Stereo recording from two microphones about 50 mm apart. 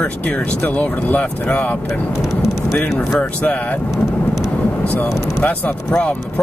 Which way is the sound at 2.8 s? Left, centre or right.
Left.